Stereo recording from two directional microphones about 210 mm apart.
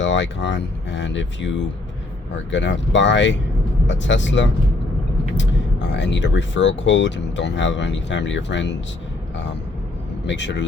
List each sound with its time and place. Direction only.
0.0 s speech: 60° left (ahead or behind)
10.2 s speech: 55° left (ahead or behind)